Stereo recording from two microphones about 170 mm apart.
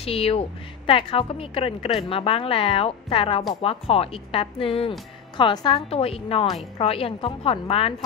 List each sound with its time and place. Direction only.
0.0 s a woman's voice: 35° left (ahead or behind)